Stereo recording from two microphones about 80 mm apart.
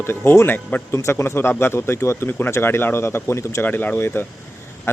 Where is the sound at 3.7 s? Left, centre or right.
Left.